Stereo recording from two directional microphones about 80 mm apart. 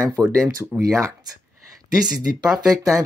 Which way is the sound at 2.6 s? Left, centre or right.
Right.